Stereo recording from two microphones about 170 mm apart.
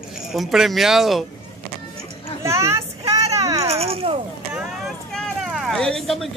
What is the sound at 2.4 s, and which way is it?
Speech, 15° right (ahead or behind).